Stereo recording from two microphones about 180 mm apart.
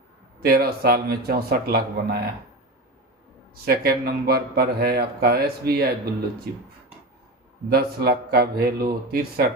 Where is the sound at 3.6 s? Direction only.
60° right (ahead or behind).